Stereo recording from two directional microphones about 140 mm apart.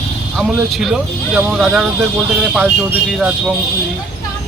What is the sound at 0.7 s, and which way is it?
Speech, centre (ahead or behind).